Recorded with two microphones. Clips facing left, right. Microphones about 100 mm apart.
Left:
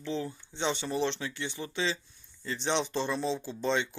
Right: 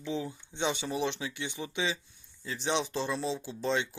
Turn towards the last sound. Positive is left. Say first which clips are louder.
# left 1 dB
turn(degrees=0)  # may be behind; listen again after turning